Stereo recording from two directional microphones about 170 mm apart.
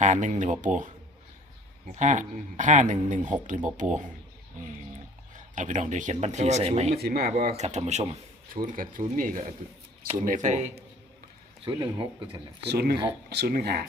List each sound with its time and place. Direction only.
0.0 s speech: 45° right (ahead or behind)
2.0 s speech: 45° right (ahead or behind)
5.3 s speech: 45° right (ahead or behind)
6.9 s speech: 65° right (ahead or behind)
7.5 s speech: 40° right (ahead or behind)
8.5 s speech: 55° right (ahead or behind)
11.6 s speech: 30° right (ahead or behind)
12.6 s speech: 70° right (ahead or behind)